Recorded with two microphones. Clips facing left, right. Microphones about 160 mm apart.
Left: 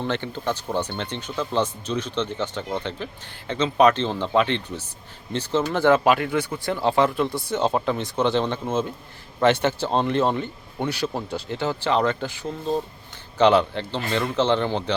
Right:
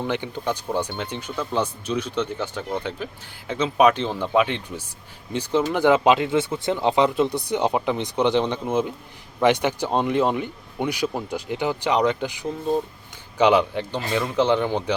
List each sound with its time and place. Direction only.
0.0 s speech: 10° right (ahead or behind)